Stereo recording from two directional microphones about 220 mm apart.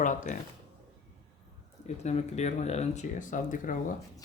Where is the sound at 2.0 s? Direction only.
30° left (ahead or behind).